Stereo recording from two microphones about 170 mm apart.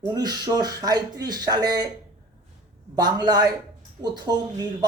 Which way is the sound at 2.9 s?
25° right (ahead or behind).